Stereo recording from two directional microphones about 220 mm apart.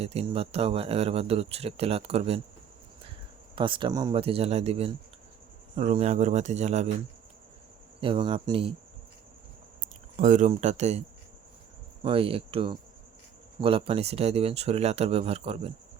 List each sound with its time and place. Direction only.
0.0 s speech: 30° right (ahead or behind)
3.5 s speech: 20° right (ahead or behind)
8.0 s speech: 25° right (ahead or behind)
9.8 s speech: 35° right (ahead or behind)
12.0 s speech: 25° right (ahead or behind)